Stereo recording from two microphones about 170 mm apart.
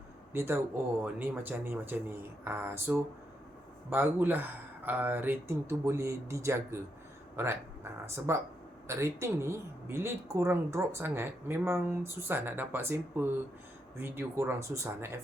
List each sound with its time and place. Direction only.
0.3 s speech: 15° right (ahead or behind)